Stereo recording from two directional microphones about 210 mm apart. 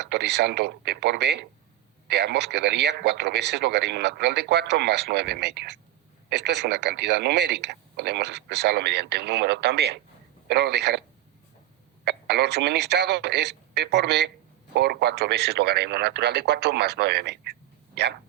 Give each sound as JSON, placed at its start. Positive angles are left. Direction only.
{"t": 0.0, "sound": "speech", "side_deg": -55}
{"t": 12.0, "sound": "speech", "side_deg": -55}